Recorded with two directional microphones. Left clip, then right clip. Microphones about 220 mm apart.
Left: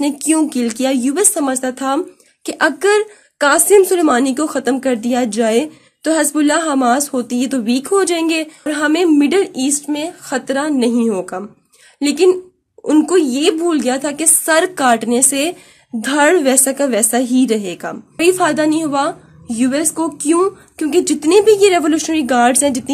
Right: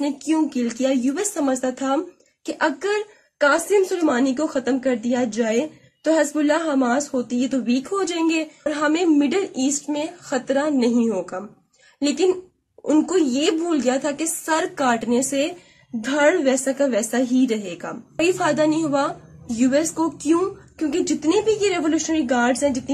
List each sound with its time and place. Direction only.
0.0 s a woman's voice: 50° left (ahead or behind)